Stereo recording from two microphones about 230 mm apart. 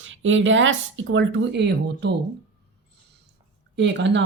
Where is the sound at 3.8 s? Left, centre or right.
Right.